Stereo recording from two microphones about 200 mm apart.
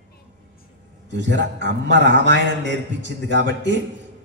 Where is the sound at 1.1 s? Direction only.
65° right (ahead or behind).